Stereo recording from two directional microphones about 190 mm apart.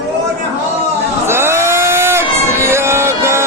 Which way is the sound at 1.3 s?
15° right (ahead or behind).